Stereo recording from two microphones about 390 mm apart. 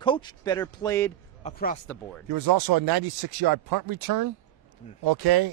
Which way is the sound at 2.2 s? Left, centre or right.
Right.